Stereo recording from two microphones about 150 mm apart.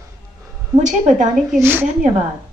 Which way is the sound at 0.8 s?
55° right (ahead or behind).